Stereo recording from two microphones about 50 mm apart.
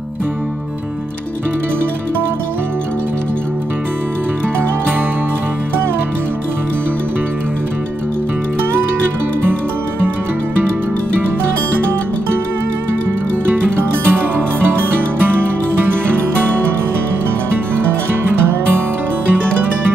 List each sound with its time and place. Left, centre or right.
9.4 s music: right
13.5 s music: right